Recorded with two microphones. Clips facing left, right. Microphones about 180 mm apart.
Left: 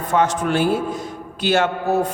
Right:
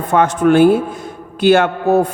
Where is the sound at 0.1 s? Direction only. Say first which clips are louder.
Right 7 dB; 55° right (ahead or behind).